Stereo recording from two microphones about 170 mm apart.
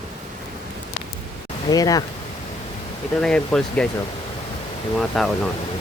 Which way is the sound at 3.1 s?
5° left (ahead or behind).